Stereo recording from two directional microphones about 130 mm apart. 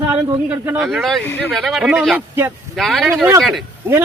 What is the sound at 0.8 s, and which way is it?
Speech, centre (ahead or behind).